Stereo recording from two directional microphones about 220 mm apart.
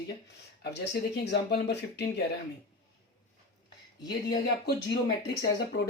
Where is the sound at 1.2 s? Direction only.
50° left (ahead or behind).